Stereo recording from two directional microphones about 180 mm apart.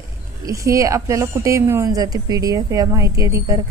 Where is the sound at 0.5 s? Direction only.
15° right (ahead or behind).